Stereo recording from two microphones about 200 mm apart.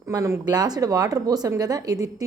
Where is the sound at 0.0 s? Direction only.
15° right (ahead or behind).